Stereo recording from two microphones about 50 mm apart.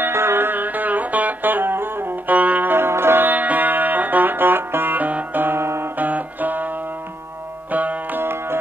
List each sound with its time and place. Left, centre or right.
0.0 s music: right
2.3 s music: right
2.7 s music: right
3.3 s music: right
5.9 s music: right
7.7 s music: right
8.2 s music: right